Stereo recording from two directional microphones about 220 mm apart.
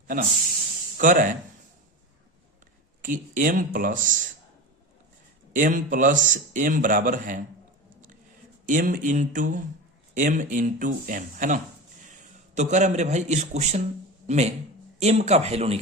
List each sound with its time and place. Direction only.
0.9 s speech: 35° right (ahead or behind)
3.0 s speech: 35° right (ahead or behind)
5.5 s speech: 35° right (ahead or behind)
8.6 s speech: 35° right (ahead or behind)